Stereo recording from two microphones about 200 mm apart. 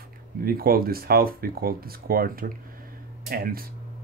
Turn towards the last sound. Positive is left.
turn(degrees=-45)  # may be behind; listen again after turning